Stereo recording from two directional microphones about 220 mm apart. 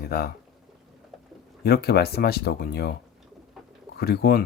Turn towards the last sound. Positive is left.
turn(degrees=45)  # may be behind; listen again after turning